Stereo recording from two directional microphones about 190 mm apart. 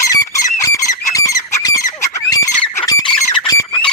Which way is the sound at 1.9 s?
15° left (ahead or behind).